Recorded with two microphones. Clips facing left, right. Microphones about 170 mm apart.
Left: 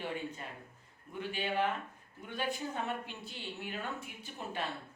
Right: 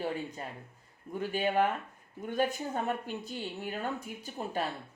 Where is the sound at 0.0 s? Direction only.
40° right (ahead or behind).